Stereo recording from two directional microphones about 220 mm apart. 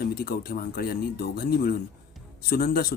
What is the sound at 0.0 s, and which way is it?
Speech, 45° left (ahead or behind).